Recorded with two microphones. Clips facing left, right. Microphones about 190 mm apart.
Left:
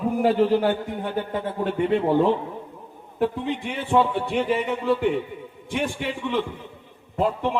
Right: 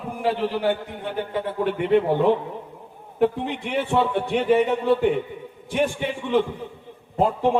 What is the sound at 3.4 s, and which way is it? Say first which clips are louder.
A man's voice: right 2 dB; 60° right (ahead or behind).